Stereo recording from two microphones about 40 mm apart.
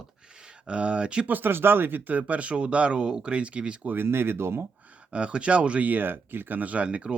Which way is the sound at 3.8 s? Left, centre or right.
Right.